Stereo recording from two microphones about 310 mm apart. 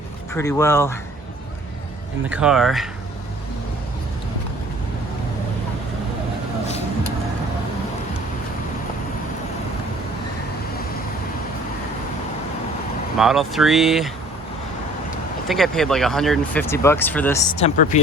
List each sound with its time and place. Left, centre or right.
0.3 s speech: centre
2.3 s speech: centre
13.1 s speech: centre
15.4 s speech: centre
17.6 s speech: left